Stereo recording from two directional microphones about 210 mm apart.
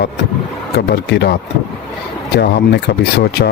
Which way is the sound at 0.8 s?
50° left (ahead or behind).